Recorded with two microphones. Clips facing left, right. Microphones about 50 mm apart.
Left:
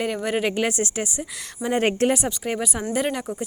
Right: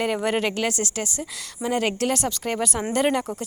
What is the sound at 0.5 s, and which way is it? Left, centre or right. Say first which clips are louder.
A woman's voice: left 2 dB; left.